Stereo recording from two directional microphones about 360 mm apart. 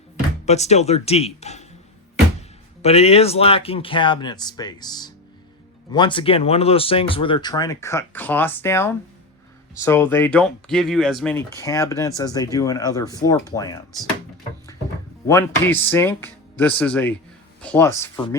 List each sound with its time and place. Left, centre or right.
0.4 s speech: centre
2.8 s speech: centre
15.3 s speech: centre